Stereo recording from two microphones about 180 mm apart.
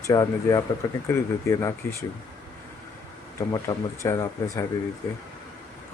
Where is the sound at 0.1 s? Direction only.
20° left (ahead or behind).